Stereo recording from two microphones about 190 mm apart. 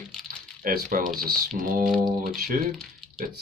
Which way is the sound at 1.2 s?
50° right (ahead or behind).